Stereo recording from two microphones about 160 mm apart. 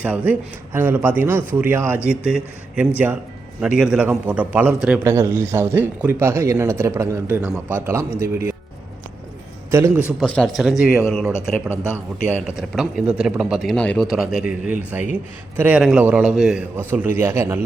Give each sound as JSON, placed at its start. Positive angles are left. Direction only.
{"t": 0.0, "sound": "speech", "side_deg": -10}
{"t": 9.7, "sound": "speech", "side_deg": -15}
{"t": 10.2, "sound": "speech", "side_deg": 5}
{"t": 12.5, "sound": "speech", "side_deg": -5}
{"t": 14.1, "sound": "speech", "side_deg": -5}
{"t": 16.9, "sound": "speech", "side_deg": -15}